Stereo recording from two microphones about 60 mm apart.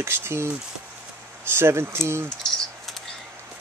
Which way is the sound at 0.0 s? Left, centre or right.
Right.